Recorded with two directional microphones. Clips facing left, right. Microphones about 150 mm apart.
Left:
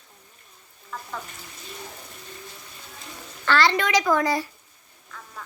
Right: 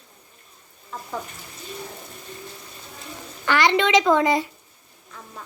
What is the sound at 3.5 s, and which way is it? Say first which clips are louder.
A child's voice: right 2 dB; 20° right (ahead or behind).